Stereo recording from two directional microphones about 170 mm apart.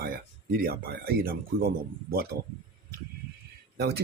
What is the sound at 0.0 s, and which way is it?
Speech, 60° right (ahead or behind).